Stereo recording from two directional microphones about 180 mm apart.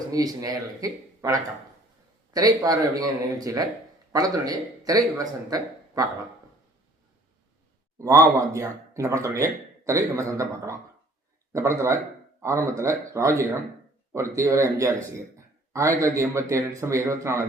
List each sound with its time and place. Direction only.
0.1 s speech: 20° right (ahead or behind)
7.9 s speech: 20° right (ahead or behind)